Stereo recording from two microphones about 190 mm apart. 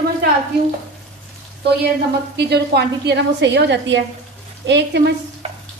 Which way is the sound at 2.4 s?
60° right (ahead or behind).